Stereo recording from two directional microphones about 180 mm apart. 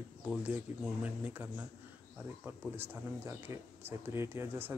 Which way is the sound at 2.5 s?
10° right (ahead or behind).